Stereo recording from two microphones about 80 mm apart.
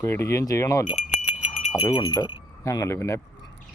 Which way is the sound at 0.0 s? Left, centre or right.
Left.